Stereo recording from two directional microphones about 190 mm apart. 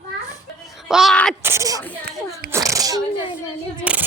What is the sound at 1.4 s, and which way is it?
Speech, 15° right (ahead or behind).